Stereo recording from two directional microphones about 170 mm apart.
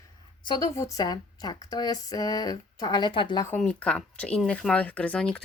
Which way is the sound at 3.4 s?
10° left (ahead or behind).